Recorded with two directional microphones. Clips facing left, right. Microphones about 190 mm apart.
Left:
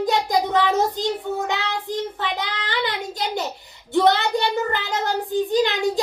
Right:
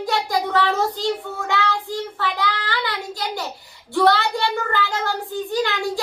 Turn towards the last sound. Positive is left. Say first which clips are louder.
# left 3 dB
turn(degrees=20)  # may be behind; listen again after turning